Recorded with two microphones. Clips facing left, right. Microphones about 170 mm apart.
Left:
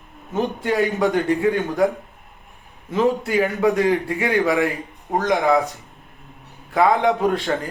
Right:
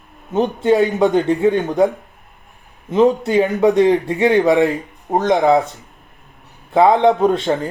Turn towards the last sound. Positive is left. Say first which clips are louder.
# right 5 dB
turn(degrees=-20)  # may be behind; listen again after turning